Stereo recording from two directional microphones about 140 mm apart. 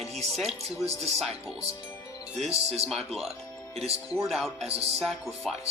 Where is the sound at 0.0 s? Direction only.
50° right (ahead or behind).